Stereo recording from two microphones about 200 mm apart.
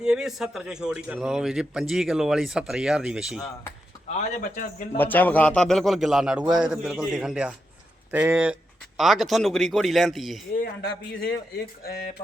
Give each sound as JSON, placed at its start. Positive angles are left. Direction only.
{"t": 0.0, "sound": "a man's voice", "side_deg": -5}
{"t": 4.1, "sound": "a man's voice", "side_deg": 40}
{"t": 4.9, "sound": "a man's voice", "side_deg": 10}
{"t": 11.1, "sound": "speech", "side_deg": 50}